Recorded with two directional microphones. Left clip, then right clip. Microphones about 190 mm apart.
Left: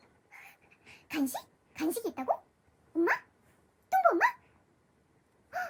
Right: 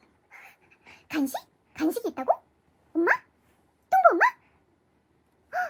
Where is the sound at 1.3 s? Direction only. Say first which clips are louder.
Right 5 dB; 15° right (ahead or behind).